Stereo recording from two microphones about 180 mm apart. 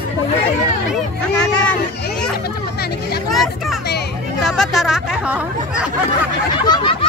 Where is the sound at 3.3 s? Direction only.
Centre (ahead or behind).